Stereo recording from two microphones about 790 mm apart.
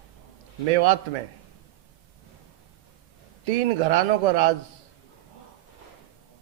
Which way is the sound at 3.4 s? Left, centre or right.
Right.